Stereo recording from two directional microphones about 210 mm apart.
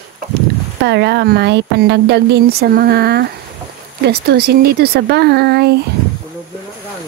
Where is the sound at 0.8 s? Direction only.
55° right (ahead or behind).